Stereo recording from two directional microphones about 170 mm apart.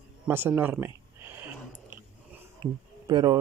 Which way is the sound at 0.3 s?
10° right (ahead or behind).